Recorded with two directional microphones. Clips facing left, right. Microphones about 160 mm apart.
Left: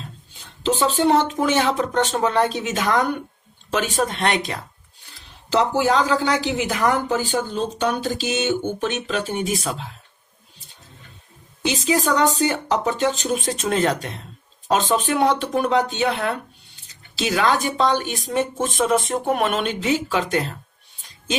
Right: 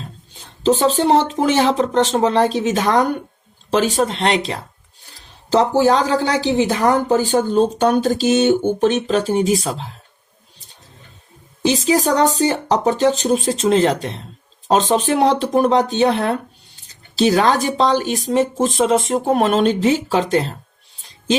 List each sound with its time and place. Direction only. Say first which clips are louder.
0.3 s a woman's voice: right 5 dB; 35° right (ahead or behind)
11.6 s a woman's voice: right 5 dB; 35° right (ahead or behind)